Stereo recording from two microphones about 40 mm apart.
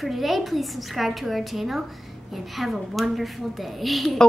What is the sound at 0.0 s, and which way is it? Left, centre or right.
A woman's voice, centre.